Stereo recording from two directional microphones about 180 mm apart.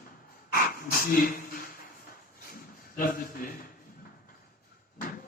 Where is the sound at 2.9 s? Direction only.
50° left (ahead or behind).